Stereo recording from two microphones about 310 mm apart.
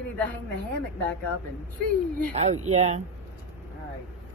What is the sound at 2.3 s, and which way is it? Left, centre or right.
Speech, right.